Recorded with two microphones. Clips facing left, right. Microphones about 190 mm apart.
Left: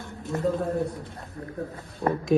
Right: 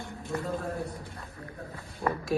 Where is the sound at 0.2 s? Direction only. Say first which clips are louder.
Left 7 dB; centre (ahead or behind).